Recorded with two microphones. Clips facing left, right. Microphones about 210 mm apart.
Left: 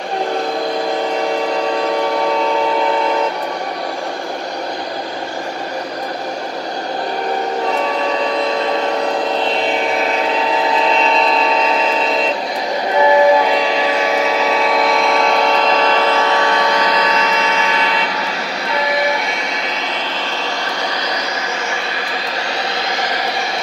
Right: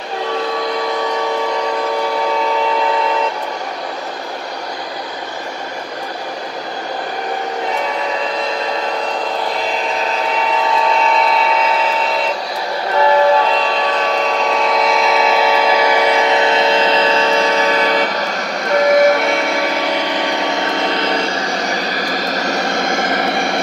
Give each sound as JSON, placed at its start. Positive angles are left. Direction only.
{"t": 10.9, "sound": "a sound", "side_deg": 30}
{"t": 12.9, "sound": "music", "side_deg": 15}
{"t": 18.7, "sound": "train", "side_deg": -50}
{"t": 20.3, "sound": "vehicle", "side_deg": -20}